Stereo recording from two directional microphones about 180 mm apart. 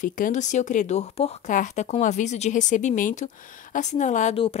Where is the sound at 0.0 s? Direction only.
45° left (ahead or behind).